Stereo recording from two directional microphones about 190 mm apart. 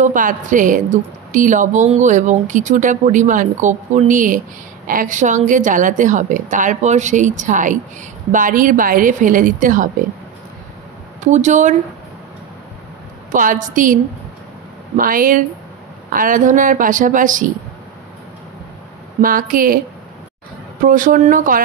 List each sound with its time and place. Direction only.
0.0 s a woman's voice: 45° right (ahead or behind)
11.2 s a woman's voice: 40° right (ahead or behind)
13.3 s a woman's voice: 45° right (ahead or behind)
15.0 s a woman's voice: 45° right (ahead or behind)
19.2 s a woman's voice: 45° right (ahead or behind)
20.8 s a woman's voice: 45° right (ahead or behind)